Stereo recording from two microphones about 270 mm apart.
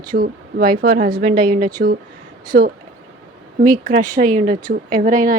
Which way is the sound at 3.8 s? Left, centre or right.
Right.